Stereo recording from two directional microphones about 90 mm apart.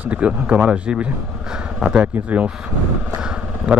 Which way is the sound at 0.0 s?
15° right (ahead or behind).